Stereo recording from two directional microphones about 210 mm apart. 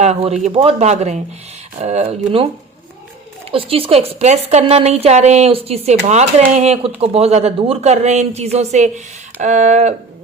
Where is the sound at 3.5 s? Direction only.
25° right (ahead or behind).